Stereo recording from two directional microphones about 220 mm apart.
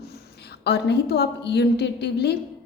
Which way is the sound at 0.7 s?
50° left (ahead or behind).